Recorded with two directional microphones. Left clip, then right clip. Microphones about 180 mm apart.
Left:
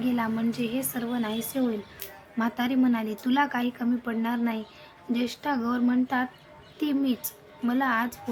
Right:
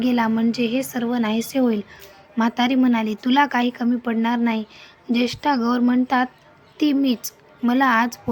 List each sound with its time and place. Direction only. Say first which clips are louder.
0.0 s speech: right 8 dB; 25° right (ahead or behind)